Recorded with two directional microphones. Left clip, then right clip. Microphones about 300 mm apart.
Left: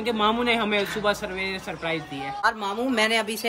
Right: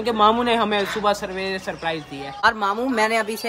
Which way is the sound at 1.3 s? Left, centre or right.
Right.